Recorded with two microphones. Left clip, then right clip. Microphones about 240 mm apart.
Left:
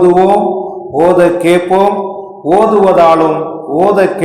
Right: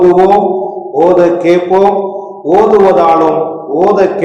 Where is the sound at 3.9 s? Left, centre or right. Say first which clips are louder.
Right 1 dB; left.